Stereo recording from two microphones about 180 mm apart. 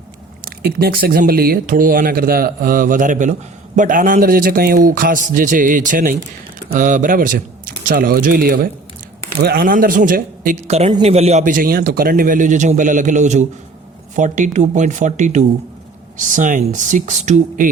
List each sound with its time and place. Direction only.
0.4 s speech: 55° right (ahead or behind); by 17.7 s 40° right (ahead or behind)